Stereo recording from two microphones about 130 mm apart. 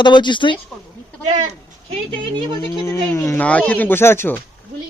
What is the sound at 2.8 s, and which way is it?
Speech, 20° left (ahead or behind).